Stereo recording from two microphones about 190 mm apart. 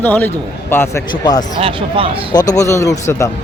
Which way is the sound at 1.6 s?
30° right (ahead or behind).